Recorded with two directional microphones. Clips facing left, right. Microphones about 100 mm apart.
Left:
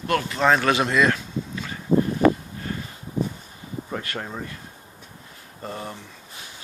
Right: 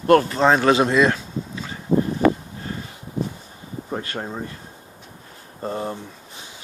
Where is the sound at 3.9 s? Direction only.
25° right (ahead or behind).